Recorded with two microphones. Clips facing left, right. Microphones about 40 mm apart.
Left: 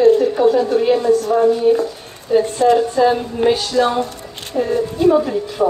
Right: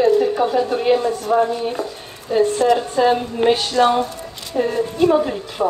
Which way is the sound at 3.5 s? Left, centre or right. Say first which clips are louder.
Right 2 dB; right.